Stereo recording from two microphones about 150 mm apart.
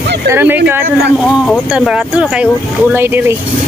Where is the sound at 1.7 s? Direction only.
5° right (ahead or behind).